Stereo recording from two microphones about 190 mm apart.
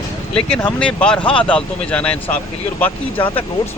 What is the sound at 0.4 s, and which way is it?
Speech, 5° left (ahead or behind).